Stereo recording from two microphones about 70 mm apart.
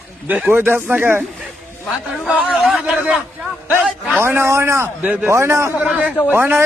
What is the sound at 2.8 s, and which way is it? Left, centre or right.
Speech, centre.